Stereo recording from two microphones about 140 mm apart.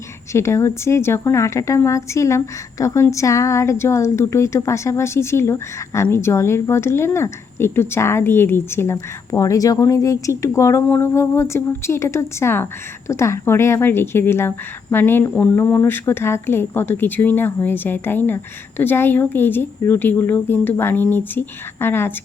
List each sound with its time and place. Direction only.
0.3 s a woman's voice: 20° left (ahead or behind)